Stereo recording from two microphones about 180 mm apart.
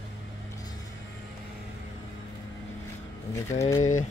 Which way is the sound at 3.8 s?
40° left (ahead or behind).